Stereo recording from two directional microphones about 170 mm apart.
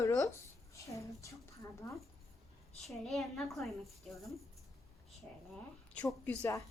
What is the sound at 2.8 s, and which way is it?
A woman's voice, centre (ahead or behind).